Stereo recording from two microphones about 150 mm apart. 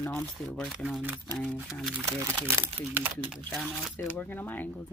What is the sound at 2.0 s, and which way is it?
Speech, 20° right (ahead or behind).